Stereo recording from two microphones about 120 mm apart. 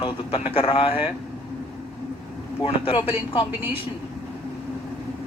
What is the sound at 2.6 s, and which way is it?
Speech, 50° left (ahead or behind).